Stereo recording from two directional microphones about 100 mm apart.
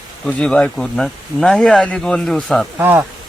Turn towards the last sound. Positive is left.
turn(degrees=-20)  # may be behind; listen again after turning